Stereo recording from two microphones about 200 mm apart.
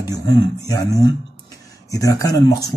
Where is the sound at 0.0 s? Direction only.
20° left (ahead or behind).